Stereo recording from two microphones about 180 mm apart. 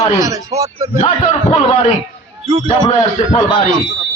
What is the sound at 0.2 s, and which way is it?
Speech, 20° right (ahead or behind).